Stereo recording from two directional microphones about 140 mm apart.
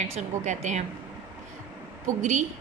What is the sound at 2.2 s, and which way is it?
Speech, 60° right (ahead or behind).